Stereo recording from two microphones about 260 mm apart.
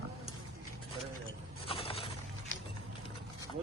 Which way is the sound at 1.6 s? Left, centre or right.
Left.